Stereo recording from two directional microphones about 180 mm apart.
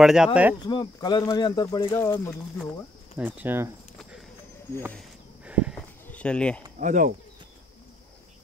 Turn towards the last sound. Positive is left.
turn(degrees=-45)  # may be behind; listen again after turning